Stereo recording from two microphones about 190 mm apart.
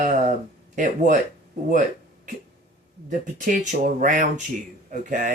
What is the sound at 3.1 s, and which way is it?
Speech, 45° right (ahead or behind).